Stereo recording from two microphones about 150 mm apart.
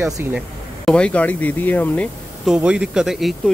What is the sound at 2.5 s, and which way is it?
Speech, 5° right (ahead or behind).